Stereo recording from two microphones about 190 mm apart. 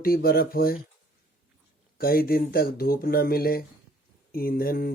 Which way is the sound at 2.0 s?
55° left (ahead or behind).